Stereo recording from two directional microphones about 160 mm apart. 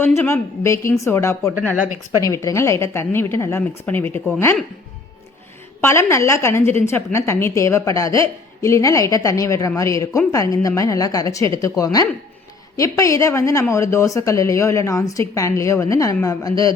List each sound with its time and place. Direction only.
0.0 s a woman's voice: 15° left (ahead or behind)
5.8 s a woman's voice: 15° left (ahead or behind)